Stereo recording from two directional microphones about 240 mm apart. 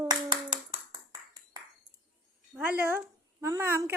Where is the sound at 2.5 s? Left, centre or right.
Centre.